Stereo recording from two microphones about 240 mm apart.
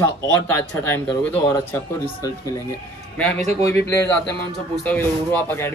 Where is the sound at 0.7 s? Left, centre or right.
Centre.